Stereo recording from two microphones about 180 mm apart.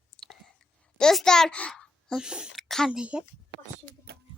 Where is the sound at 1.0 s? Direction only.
5° left (ahead or behind).